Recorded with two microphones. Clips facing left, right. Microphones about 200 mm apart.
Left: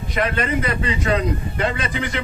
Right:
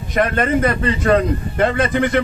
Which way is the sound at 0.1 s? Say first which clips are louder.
Right 5 dB; 50° right (ahead or behind).